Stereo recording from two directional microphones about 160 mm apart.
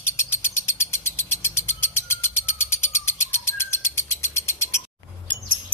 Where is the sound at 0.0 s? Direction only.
15° left (ahead or behind).